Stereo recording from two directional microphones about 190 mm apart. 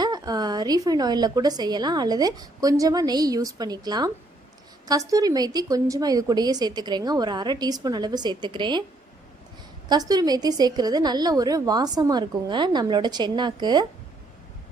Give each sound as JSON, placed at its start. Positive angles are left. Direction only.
{"t": 0.0, "sound": "a woman's voice", "side_deg": -20}
{"t": 9.9, "sound": "a woman's voice", "side_deg": -20}